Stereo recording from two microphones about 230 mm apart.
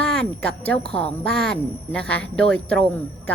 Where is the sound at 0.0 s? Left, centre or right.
Centre.